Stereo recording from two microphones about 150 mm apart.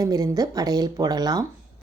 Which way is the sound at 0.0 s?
25° right (ahead or behind).